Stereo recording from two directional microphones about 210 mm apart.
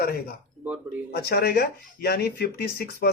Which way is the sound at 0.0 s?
45° left (ahead or behind).